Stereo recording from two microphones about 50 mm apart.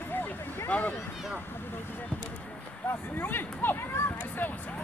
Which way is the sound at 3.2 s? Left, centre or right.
Left.